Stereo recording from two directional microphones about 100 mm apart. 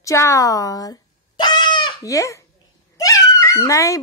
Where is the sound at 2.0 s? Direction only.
30° left (ahead or behind).